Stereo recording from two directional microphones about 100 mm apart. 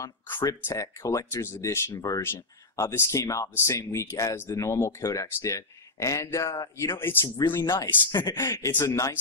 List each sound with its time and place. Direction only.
0.5 s speech: 35° left (ahead or behind)
2.0 s speech: 35° left (ahead or behind)
8.1 s speech: 40° left (ahead or behind)